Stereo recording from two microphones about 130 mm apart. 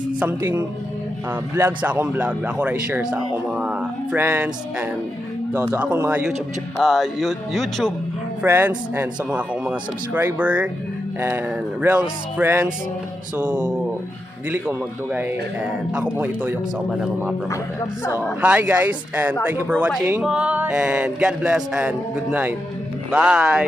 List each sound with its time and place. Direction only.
0.2 s speech: 10° right (ahead or behind)
8.4 s speech: 15° right (ahead or behind)
17.5 s speech: 20° left (ahead or behind)
18.2 s speech: 10° right (ahead or behind)